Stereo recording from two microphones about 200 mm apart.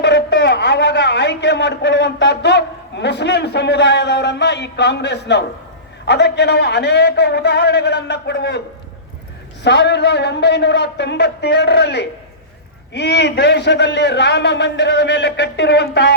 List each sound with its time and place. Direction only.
0.0 s a man's voice: 60° left (ahead or behind)
9.6 s a man's voice: 60° left (ahead or behind)